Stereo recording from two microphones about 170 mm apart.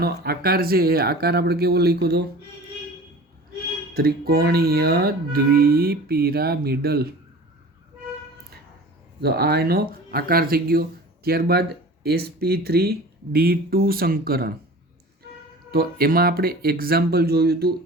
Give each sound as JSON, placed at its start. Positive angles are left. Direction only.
{"t": 0.0, "sound": "speech", "side_deg": -65}
{"t": 3.9, "sound": "speech", "side_deg": -65}
{"t": 9.2, "sound": "speech", "side_deg": -65}
{"t": 15.7, "sound": "speech", "side_deg": -60}